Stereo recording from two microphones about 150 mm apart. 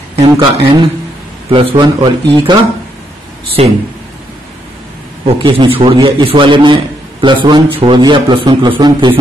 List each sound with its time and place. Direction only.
0.1 s a man's voice: 40° right (ahead or behind)
3.6 s speech: 40° right (ahead or behind)
5.2 s a man's voice: 35° right (ahead or behind)